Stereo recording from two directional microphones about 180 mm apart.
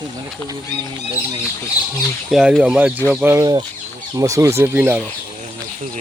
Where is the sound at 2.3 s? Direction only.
Centre (ahead or behind).